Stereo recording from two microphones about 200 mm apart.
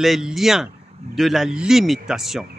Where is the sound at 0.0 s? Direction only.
Centre (ahead or behind).